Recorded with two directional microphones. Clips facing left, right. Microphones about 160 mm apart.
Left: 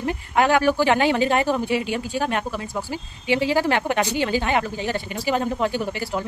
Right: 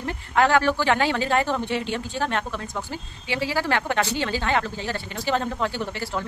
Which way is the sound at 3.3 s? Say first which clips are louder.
Left 5 dB; 20° left (ahead or behind).